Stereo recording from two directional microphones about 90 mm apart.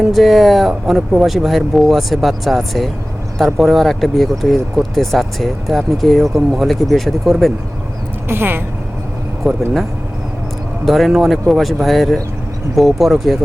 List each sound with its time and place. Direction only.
0.0 s speech: centre (ahead or behind)
8.3 s speech: 25° right (ahead or behind)
9.5 s speech: centre (ahead or behind)
10.8 s speech: centre (ahead or behind)